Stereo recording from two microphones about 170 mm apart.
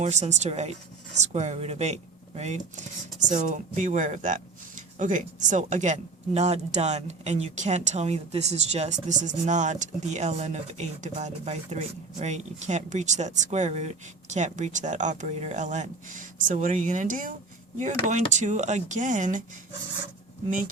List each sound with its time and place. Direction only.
0.0 s speech: 40° right (ahead or behind)